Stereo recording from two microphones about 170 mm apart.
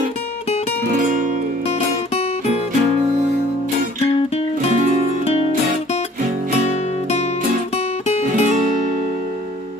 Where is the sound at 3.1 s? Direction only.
45° right (ahead or behind).